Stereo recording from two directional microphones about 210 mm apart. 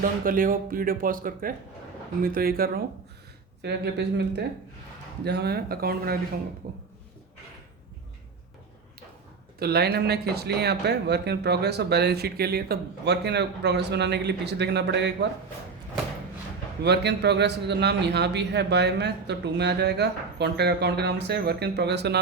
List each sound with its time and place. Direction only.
0.0 s speech: 40° right (ahead or behind)
9.6 s speech: 50° right (ahead or behind)
16.8 s speech: 55° right (ahead or behind)